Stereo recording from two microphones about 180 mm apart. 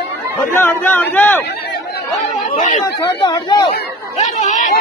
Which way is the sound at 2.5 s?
45° left (ahead or behind).